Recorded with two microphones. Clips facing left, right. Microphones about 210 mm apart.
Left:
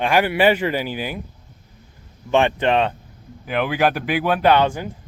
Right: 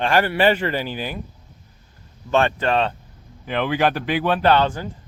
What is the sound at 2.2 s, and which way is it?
Speech, 15° left (ahead or behind).